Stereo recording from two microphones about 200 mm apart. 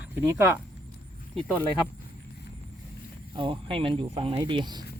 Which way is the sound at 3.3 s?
25° right (ahead or behind).